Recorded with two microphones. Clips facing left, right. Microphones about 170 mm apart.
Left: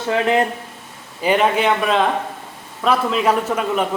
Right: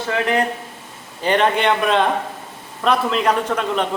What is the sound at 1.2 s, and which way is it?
A man's voice, 5° left (ahead or behind).